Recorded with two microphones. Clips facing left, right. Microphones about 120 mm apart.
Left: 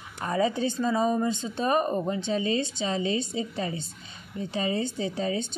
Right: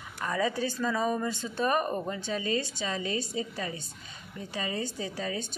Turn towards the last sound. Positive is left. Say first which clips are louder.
# left 5 dB
turn(degrees=25)  # may be behind; listen again after turning